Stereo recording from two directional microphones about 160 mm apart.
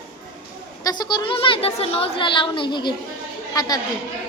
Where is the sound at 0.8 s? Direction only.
25° left (ahead or behind).